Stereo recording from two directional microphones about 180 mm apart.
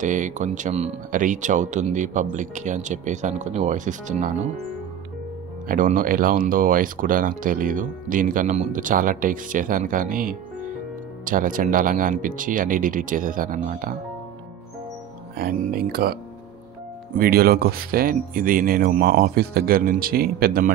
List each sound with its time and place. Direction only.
0.0 s speech: 45° right (ahead or behind)
5.7 s speech: 45° right (ahead or behind)
15.3 s speech: 55° right (ahead or behind)